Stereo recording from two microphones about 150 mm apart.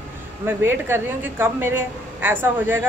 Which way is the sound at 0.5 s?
15° right (ahead or behind).